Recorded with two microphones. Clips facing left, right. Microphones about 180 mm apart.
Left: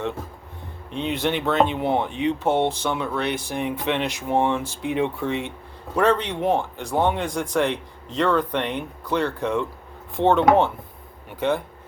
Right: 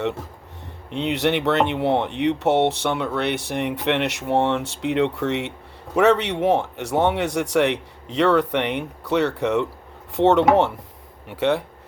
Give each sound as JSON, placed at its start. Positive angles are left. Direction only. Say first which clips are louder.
{"t": 0.9, "sound": "speech", "louder": "right 3 dB", "side_deg": -70}